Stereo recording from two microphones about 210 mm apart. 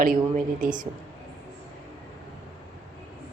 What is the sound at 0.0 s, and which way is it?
Speech, 45° right (ahead or behind).